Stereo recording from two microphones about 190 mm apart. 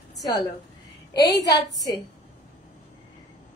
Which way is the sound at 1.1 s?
60° left (ahead or behind).